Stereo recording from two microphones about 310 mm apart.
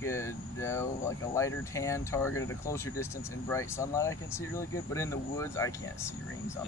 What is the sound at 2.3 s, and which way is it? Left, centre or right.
Speech, left.